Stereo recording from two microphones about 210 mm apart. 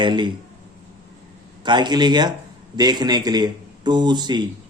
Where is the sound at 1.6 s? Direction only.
20° right (ahead or behind).